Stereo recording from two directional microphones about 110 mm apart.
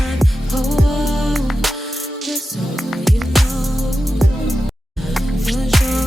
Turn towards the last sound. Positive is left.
turn(degrees=0)  # may be behind; listen again after turning